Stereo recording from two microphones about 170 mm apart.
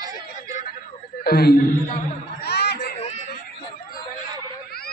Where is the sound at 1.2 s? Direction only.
65° left (ahead or behind).